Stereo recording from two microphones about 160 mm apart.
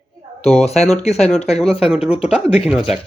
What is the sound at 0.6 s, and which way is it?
Speech, 40° left (ahead or behind).